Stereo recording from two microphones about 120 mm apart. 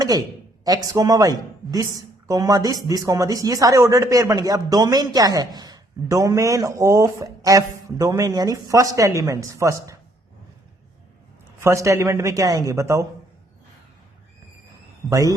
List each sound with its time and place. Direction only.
0.6 s a woman's voice: 30° right (ahead or behind)
11.6 s a woman's voice: 25° right (ahead or behind)